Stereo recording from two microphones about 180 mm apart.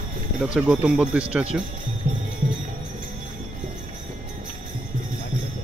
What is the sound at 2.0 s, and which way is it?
Music, 45° right (ahead or behind).